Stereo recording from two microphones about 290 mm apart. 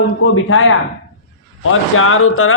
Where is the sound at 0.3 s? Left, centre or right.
Left.